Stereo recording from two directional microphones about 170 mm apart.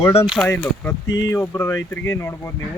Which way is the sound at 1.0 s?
90° left.